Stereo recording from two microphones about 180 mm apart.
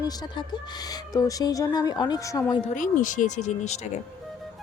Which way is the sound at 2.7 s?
45° left (ahead or behind).